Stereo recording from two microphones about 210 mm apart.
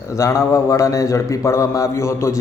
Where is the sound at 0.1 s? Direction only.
15° left (ahead or behind).